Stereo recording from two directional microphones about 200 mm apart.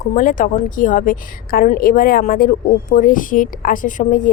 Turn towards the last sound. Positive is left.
turn(degrees=40)  # may be behind; listen again after turning